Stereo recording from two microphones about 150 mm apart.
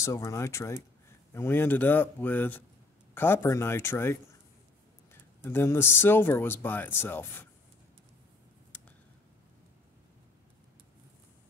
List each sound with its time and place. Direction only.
0.0 s speech: 20° left (ahead or behind)
5.4 s speech: 15° left (ahead or behind)